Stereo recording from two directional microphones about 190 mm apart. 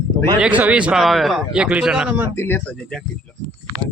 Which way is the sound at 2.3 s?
10° left (ahead or behind).